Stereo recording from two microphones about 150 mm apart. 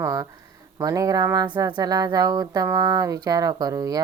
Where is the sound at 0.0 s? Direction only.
20° right (ahead or behind).